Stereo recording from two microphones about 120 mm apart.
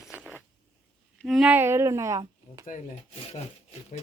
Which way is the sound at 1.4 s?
15° right (ahead or behind).